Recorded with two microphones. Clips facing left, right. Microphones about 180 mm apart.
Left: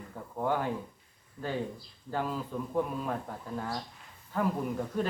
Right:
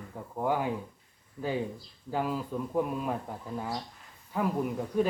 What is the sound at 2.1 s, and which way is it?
Speech, 10° right (ahead or behind).